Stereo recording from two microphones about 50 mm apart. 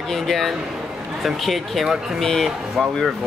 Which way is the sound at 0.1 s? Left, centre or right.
Centre.